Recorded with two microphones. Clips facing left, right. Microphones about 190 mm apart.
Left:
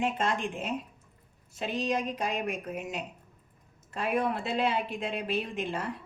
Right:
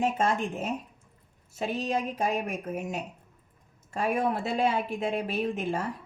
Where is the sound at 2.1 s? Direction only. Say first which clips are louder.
Right 3 dB; 45° right (ahead or behind).